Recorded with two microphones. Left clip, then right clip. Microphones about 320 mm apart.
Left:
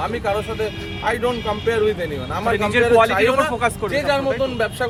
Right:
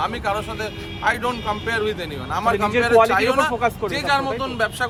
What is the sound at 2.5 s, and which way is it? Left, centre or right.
A man's voice, left.